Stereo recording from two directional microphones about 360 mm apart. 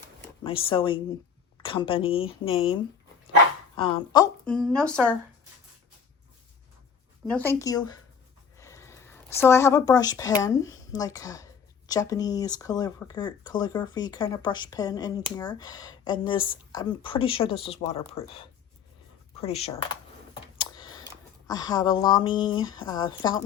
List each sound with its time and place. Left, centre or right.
0.4 s speech: centre
3.8 s a woman's voice: centre
7.3 s speech: centre